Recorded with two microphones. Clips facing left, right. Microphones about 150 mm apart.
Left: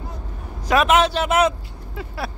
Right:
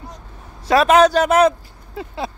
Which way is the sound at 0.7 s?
35° right (ahead or behind).